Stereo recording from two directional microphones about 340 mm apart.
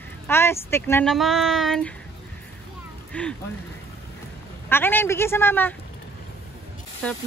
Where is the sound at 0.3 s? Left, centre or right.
Centre.